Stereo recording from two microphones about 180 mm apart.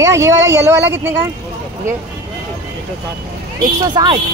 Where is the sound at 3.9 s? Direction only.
25° right (ahead or behind).